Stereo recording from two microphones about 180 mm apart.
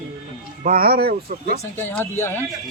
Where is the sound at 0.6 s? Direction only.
55° right (ahead or behind).